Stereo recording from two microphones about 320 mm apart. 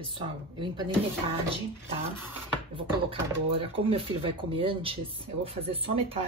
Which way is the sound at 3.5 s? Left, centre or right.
Centre.